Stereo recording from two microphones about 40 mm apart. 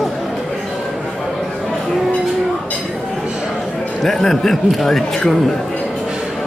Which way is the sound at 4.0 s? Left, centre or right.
Centre.